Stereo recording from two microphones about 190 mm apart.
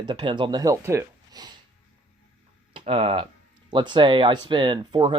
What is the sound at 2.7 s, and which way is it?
Speech, 30° right (ahead or behind).